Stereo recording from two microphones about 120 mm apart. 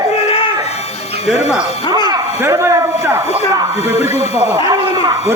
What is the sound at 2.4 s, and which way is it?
Speech, 20° right (ahead or behind).